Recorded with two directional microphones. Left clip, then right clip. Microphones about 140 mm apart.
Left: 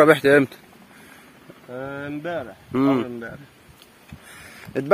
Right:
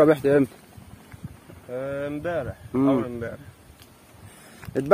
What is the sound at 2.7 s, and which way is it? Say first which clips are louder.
Speech: left 2 dB; centre (ahead or behind).